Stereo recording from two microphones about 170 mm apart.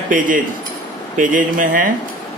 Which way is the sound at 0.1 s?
50° right (ahead or behind).